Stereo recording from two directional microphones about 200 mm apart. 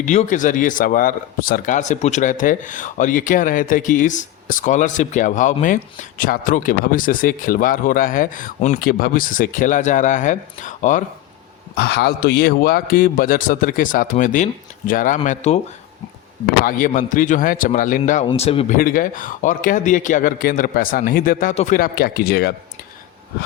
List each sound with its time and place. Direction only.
0.0 s speech: 35° left (ahead or behind)
11.7 s a man's voice: 55° left (ahead or behind); by 15.5 s 35° left (ahead or behind)
16.6 s speech: 40° left (ahead or behind)
18.8 s a man's voice: 45° left (ahead or behind)